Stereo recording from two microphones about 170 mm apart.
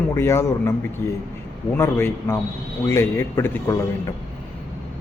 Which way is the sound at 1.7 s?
15° left (ahead or behind).